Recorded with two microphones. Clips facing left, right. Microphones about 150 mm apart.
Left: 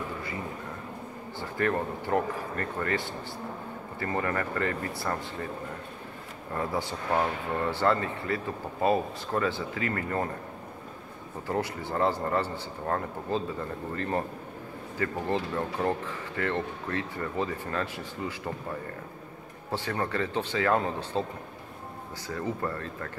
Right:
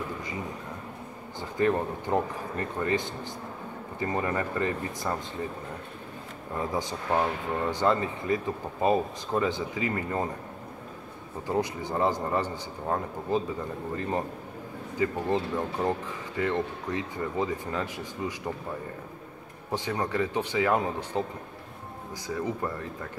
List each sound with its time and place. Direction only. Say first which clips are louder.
1.4 s speech: right 3 dB; 15° right (ahead or behind)
6.5 s speech: even; 15° right (ahead or behind)
11.4 s speech: right 2 dB; 15° right (ahead or behind)
19.7 s speech: right 1 dB; 15° right (ahead or behind)
22.3 s speech: right 1 dB; 15° right (ahead or behind)